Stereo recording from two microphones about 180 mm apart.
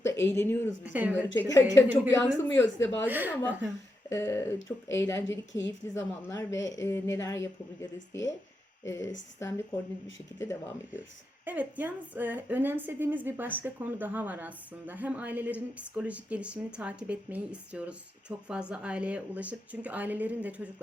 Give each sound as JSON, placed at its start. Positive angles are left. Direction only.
{"t": 0.1, "sound": "speech", "side_deg": 15}
{"t": 0.9, "sound": "a woman's voice", "side_deg": -10}
{"t": 1.4, "sound": "speech", "side_deg": 15}
{"t": 3.1, "sound": "a woman's voice", "side_deg": -10}
{"t": 4.1, "sound": "a woman's voice", "side_deg": 15}
{"t": 10.3, "sound": "speech", "side_deg": 15}
{"t": 11.4, "sound": "a woman's voice", "side_deg": -10}